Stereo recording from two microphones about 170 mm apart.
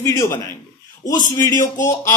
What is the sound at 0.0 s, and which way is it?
Speech, 20° left (ahead or behind).